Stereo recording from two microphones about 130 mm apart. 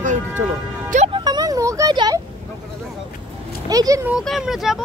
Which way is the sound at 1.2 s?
30° right (ahead or behind).